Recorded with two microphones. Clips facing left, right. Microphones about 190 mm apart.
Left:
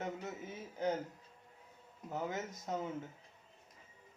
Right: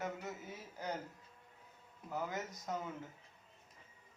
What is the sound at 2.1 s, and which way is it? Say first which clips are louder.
Speech: left 2 dB; 25° left (ahead or behind).